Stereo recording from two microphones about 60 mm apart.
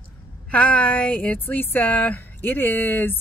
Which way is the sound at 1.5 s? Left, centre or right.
Left.